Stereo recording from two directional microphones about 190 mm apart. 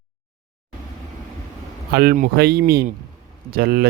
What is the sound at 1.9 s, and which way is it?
Speech, 55° right (ahead or behind).